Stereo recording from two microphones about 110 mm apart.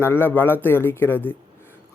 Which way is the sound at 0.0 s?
20° left (ahead or behind).